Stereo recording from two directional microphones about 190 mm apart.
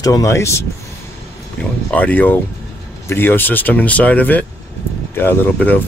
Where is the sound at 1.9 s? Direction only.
10° left (ahead or behind).